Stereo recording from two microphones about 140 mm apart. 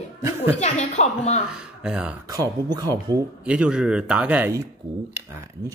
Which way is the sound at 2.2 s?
25° right (ahead or behind).